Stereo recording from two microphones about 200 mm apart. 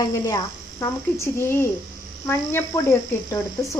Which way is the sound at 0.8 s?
15° left (ahead or behind).